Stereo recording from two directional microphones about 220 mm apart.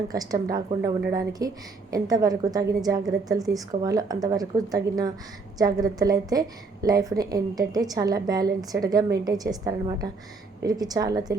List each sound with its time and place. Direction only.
0.1 s a woman's voice: 15° right (ahead or behind)